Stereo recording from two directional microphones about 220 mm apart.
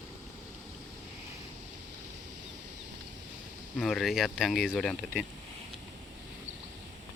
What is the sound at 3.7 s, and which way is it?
Speech, centre (ahead or behind).